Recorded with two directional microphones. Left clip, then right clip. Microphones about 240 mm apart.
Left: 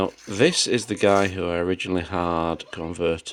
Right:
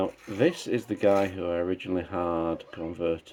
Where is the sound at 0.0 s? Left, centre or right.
Left.